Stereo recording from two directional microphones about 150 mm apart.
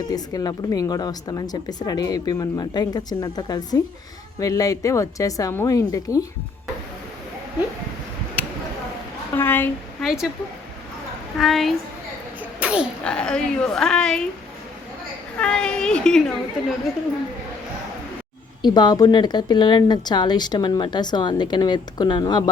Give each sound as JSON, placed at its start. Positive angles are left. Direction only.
{"t": 0.1, "sound": "a woman's voice", "side_deg": 25}
{"t": 9.3, "sound": "a woman's voice", "side_deg": 15}
{"t": 10.0, "sound": "a woman's voice", "side_deg": 0}
{"t": 11.3, "sound": "a woman's voice", "side_deg": 0}
{"t": 12.4, "sound": "a sound", "side_deg": -10}
{"t": 13.1, "sound": "a woman's voice", "side_deg": 5}
{"t": 15.4, "sound": "a woman's voice", "side_deg": 5}
{"t": 18.6, "sound": "a woman's voice", "side_deg": 30}